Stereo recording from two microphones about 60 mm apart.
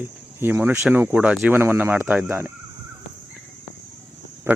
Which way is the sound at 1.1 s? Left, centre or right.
Right.